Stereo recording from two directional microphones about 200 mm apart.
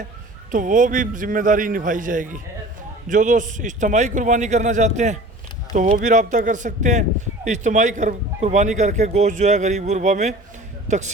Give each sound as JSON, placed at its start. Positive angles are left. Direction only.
{"t": 0.5, "sound": "a man's voice", "side_deg": -40}